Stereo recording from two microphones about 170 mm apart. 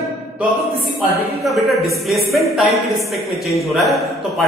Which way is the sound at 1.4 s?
Centre (ahead or behind).